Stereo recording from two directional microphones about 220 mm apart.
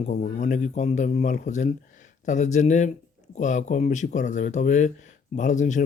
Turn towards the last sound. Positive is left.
turn(degrees=35)  # may be behind; listen again after turning